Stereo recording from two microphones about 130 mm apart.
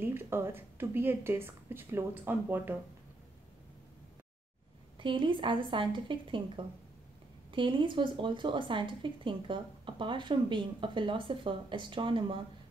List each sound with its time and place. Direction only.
0.0 s a woman's voice: 20° right (ahead or behind)
4.9 s speech: 40° right (ahead or behind)